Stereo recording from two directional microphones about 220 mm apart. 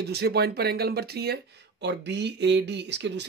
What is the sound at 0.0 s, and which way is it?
Speech, 45° right (ahead or behind).